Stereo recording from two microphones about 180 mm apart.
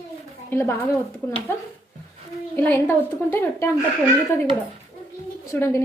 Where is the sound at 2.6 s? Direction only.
10° left (ahead or behind).